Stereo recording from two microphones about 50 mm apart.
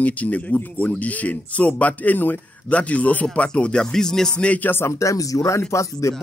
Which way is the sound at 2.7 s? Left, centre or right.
Left.